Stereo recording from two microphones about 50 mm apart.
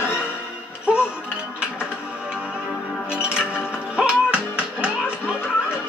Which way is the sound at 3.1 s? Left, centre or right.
Right.